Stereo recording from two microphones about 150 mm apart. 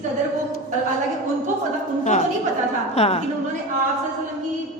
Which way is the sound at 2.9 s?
45° left (ahead or behind).